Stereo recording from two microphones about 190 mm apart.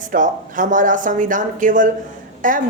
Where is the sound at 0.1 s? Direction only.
45° right (ahead or behind).